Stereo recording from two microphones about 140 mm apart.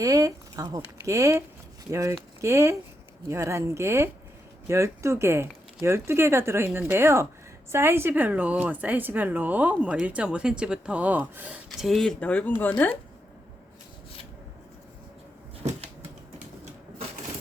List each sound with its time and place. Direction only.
0.0 s speech: 25° right (ahead or behind); by 12.7 s 15° left (ahead or behind)